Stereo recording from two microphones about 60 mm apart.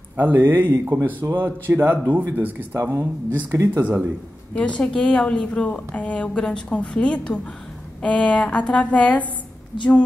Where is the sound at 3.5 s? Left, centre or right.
Right.